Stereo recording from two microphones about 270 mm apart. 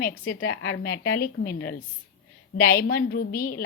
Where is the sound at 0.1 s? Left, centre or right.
Left.